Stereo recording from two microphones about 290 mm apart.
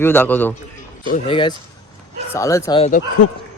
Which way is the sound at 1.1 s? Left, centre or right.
Centre.